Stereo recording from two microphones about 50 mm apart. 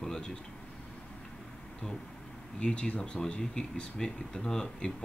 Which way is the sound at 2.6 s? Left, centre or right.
Left.